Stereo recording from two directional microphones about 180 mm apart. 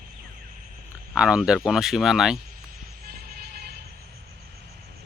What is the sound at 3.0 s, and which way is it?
Vehicle, 55° right (ahead or behind).